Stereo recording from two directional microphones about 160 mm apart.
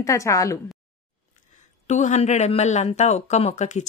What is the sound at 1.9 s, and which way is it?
A man's voice, 45° left (ahead or behind).